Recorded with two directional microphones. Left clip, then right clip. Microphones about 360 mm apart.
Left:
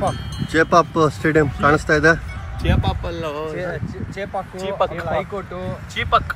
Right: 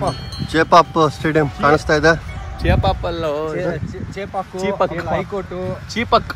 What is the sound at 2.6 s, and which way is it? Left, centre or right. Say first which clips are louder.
Speech: right 6 dB; right.